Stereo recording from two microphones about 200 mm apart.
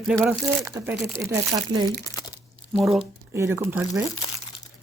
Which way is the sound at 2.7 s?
Centre (ahead or behind).